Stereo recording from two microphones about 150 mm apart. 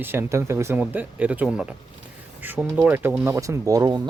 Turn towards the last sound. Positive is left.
turn(degrees=-25)  # may be behind; listen again after turning